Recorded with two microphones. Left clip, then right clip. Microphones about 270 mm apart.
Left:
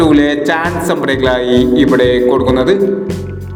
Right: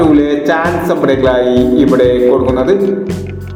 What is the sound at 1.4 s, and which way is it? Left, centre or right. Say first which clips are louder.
Speech: right 1 dB; centre.